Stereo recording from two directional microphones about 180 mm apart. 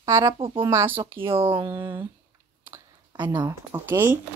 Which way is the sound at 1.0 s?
30° right (ahead or behind).